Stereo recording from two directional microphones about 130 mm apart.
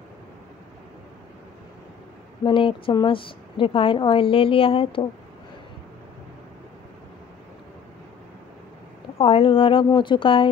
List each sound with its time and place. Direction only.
2.4 s speech: 40° left (ahead or behind)
9.2 s a woman's voice: 45° left (ahead or behind)